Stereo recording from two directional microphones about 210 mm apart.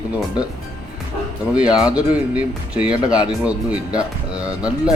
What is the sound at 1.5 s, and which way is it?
Speech, 5° right (ahead or behind).